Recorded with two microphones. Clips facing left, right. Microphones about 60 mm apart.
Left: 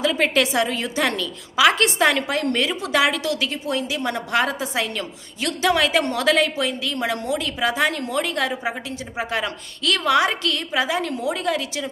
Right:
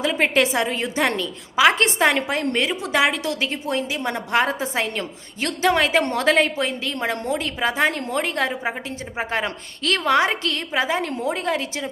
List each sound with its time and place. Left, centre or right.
0.0 s a woman's voice: right